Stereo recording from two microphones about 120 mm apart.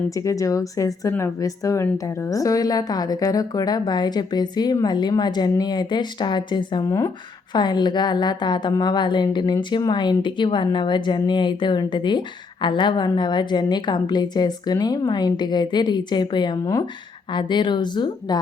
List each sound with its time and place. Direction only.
0.2 s a woman's voice: 25° left (ahead or behind)